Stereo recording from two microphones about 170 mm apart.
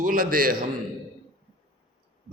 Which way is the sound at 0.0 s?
55° right (ahead or behind).